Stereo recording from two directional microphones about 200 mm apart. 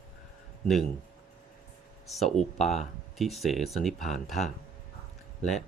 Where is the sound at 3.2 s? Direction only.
Centre (ahead or behind).